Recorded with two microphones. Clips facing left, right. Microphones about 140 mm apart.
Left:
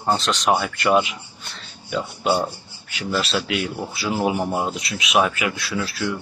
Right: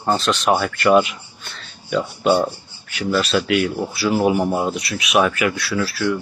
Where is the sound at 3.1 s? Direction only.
25° left (ahead or behind).